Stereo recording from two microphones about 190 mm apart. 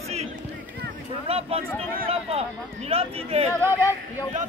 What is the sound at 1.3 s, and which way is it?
Speech, 30° right (ahead or behind).